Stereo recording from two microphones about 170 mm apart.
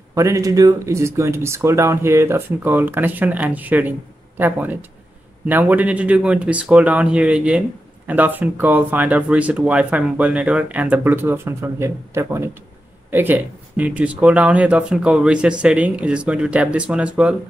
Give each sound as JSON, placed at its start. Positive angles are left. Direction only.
{"t": 0.1, "sound": "speech", "side_deg": -20}